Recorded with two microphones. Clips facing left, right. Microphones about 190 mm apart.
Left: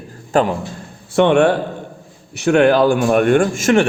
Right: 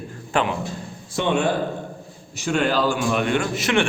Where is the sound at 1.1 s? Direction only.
65° left (ahead or behind).